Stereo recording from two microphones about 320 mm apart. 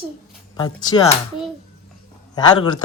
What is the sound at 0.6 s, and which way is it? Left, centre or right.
Speech, centre.